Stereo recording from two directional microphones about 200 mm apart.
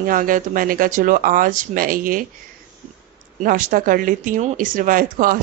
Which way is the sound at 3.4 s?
40° right (ahead or behind).